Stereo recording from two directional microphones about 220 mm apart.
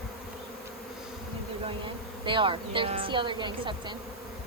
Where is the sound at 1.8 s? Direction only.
20° right (ahead or behind).